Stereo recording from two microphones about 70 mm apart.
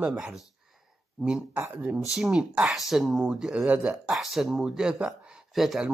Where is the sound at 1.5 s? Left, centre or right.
Right.